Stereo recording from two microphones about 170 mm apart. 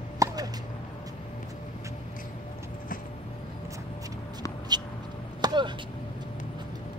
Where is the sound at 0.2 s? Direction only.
20° right (ahead or behind).